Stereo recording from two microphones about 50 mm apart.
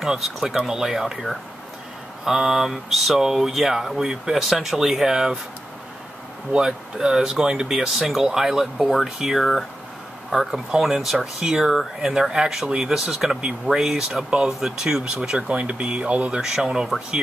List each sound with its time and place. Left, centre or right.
0.0 s speech: centre
2.2 s speech: centre
6.5 s speech: centre
15.2 s speech: right
16.3 s speech: centre